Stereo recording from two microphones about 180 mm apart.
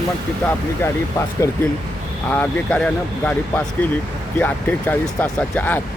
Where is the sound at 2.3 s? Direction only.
10° left (ahead or behind).